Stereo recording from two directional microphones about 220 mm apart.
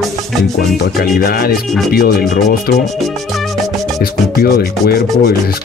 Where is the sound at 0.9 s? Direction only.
45° left (ahead or behind).